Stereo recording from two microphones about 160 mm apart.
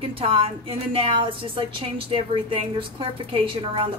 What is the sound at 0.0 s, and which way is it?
A woman's voice, 35° right (ahead or behind).